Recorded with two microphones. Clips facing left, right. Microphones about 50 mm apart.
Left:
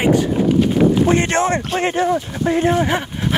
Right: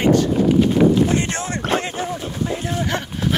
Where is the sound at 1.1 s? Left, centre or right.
Left.